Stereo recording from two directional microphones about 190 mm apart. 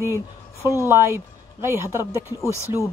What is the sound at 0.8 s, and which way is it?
Speech, 15° right (ahead or behind).